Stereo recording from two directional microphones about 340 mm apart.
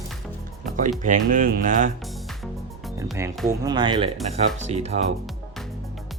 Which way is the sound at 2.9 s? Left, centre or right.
Centre.